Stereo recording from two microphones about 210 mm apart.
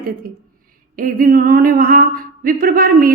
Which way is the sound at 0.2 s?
45° right (ahead or behind).